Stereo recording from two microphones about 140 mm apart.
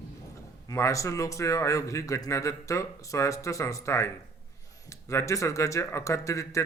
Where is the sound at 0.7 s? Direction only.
20° left (ahead or behind).